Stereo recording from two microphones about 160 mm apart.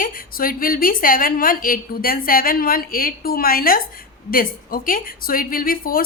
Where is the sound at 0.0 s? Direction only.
65° left (ahead or behind).